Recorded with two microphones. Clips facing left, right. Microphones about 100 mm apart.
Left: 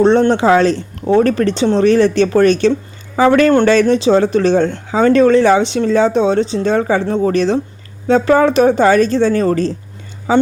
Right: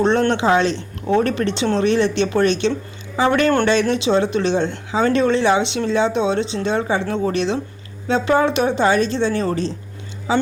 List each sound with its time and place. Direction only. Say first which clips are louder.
0.0 s speech: left 6 dB; 35° left (ahead or behind)